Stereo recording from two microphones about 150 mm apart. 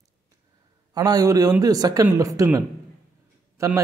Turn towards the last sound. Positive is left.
turn(degrees=-20)  # may be behind; listen again after turning